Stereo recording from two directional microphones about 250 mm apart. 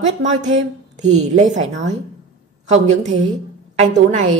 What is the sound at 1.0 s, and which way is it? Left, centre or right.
A woman's voice, right.